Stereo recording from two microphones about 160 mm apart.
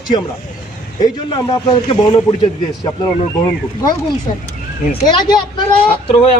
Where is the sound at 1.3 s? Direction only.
30° left (ahead or behind).